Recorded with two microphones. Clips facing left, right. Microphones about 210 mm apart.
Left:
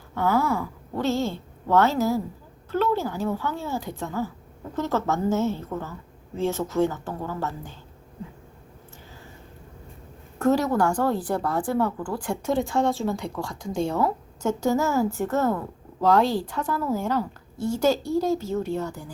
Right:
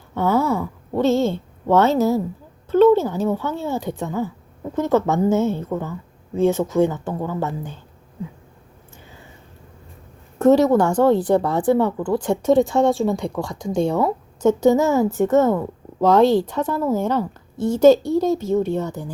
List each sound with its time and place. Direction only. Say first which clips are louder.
0.1 s a woman's voice: right 4 dB; 20° right (ahead or behind)
10.3 s a woman's voice: right 7 dB; 20° right (ahead or behind)